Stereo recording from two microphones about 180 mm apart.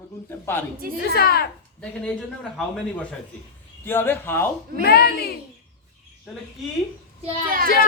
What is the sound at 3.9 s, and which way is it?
Speech, 10° left (ahead or behind).